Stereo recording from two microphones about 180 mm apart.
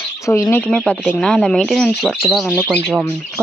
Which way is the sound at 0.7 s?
5° left (ahead or behind).